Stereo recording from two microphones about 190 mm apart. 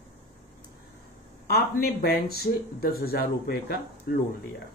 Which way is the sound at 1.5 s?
55° left (ahead or behind).